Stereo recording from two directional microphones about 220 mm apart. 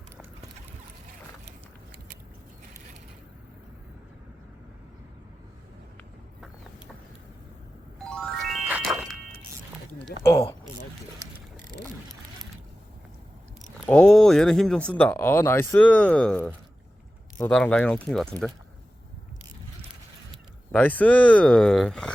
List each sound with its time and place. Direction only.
7.9 s music: centre (ahead or behind)
10.1 s speech: 45° left (ahead or behind)
13.8 s speech: 5° left (ahead or behind)
20.7 s speech: 5° left (ahead or behind)